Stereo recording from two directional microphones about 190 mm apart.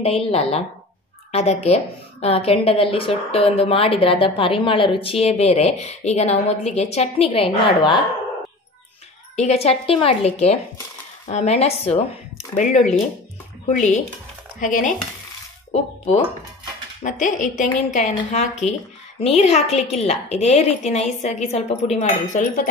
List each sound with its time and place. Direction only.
0.0 s a woman's voice: 30° left (ahead or behind)
9.4 s a woman's voice: 35° left (ahead or behind)
17.0 s a woman's voice: 40° left (ahead or behind)